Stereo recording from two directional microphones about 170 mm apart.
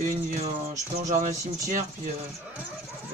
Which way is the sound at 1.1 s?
50° right (ahead or behind).